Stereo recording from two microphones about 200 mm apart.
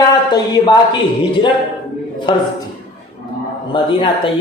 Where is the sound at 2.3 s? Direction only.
25° left (ahead or behind).